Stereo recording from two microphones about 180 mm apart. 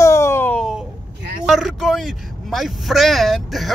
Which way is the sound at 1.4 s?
Centre (ahead or behind).